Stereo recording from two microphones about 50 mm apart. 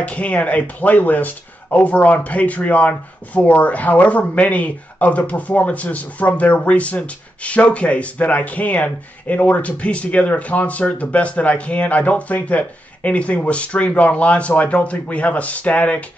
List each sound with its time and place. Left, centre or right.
0.0 s speech: left